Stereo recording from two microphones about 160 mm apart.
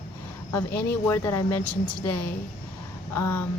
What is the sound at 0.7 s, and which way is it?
Speech, 15° left (ahead or behind).